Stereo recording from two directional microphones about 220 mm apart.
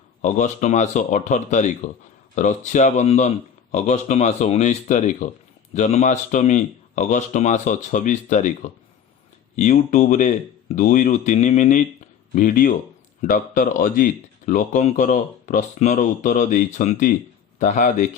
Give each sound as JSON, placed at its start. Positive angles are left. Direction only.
{"t": 0.2, "sound": "speech", "side_deg": 35}
{"t": 9.6, "sound": "speech", "side_deg": 30}